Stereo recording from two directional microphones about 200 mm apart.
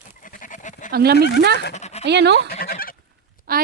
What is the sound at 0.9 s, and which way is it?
Speech, 50° right (ahead or behind).